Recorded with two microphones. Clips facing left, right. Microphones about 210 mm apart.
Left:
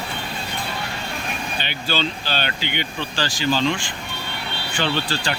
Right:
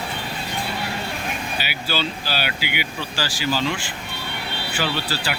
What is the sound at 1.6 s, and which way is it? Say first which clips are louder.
Speech: left 3 dB; 5° right (ahead or behind).